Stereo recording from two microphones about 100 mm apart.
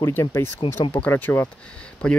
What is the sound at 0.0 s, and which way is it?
Speech, 30° left (ahead or behind).